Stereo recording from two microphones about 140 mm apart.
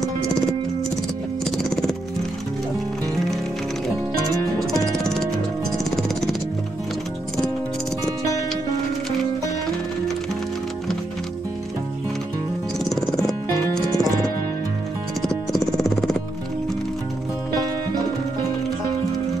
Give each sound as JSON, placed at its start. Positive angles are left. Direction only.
{"t": 1.4, "sound": "music", "side_deg": 5}
{"t": 4.9, "sound": "music", "side_deg": 5}
{"t": 12.9, "sound": "music", "side_deg": 5}
{"t": 15.2, "sound": "music", "side_deg": 5}